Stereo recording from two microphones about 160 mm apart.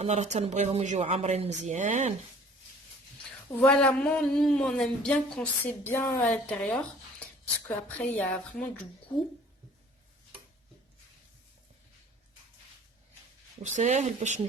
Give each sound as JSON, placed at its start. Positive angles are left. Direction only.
{"t": 0.0, "sound": "speech", "side_deg": -45}
{"t": 3.6, "sound": "speech", "side_deg": 5}
{"t": 7.9, "sound": "speech", "side_deg": 10}
{"t": 13.6, "sound": "speech", "side_deg": -50}